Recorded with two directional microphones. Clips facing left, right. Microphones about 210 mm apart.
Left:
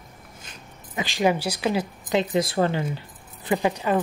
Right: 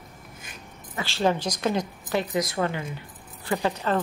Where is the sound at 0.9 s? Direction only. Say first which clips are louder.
Left 2 dB; 15° left (ahead or behind).